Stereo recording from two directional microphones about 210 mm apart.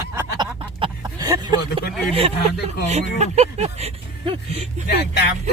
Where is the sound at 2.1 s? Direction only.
30° right (ahead or behind).